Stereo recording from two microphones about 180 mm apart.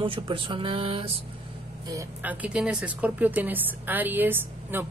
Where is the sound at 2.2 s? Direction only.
10° right (ahead or behind).